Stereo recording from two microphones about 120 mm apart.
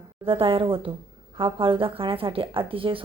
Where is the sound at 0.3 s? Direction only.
50° right (ahead or behind).